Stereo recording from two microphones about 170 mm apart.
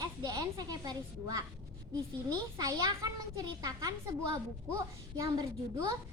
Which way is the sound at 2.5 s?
20° right (ahead or behind).